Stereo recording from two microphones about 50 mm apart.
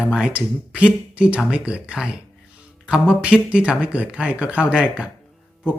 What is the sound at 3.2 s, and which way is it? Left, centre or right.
Speech, right.